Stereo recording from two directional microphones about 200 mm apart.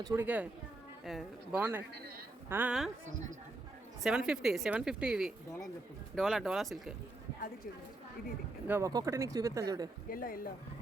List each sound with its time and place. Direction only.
0.0 s speech: 15° right (ahead or behind)
4.0 s speech: 5° right (ahead or behind)
8.6 s speech: 15° right (ahead or behind)
10.1 s speech: 45° left (ahead or behind)